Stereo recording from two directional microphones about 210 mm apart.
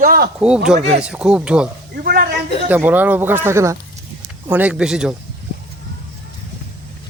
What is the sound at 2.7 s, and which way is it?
A man's voice, 10° right (ahead or behind).